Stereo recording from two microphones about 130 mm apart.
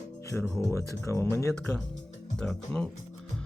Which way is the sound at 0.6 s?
20° left (ahead or behind).